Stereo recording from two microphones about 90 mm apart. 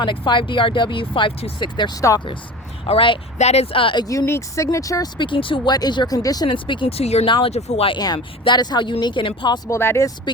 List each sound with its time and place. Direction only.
0.0 s speech: 60° left (ahead or behind)
2.8 s speech: 85° left
4.3 s speech: 35° left (ahead or behind)
5.1 s speech: 65° left (ahead or behind)
5.7 s speech: 50° left (ahead or behind)
6.5 s speech: 65° left (ahead or behind); by 7.9 s 85° left
7.9 s speech: 50° left (ahead or behind)
9.6 s speech: 30° left (ahead or behind)
10.3 s speech: 55° left (ahead or behind)